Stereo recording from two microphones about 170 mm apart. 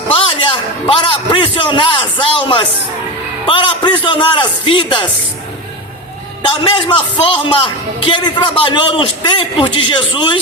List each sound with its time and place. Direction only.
0.1 s a man's voice: 30° left (ahead or behind)
6.7 s a man's voice: 30° left (ahead or behind)